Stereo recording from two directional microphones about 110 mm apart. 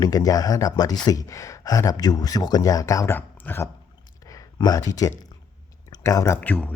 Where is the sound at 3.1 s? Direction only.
20° left (ahead or behind).